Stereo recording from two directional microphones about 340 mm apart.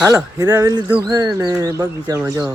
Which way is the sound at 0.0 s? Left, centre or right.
Centre.